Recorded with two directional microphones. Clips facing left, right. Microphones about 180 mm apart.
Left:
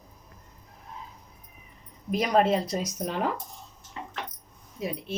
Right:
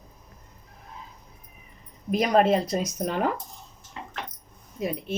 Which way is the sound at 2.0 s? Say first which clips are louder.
Right 2 dB; 55° right (ahead or behind).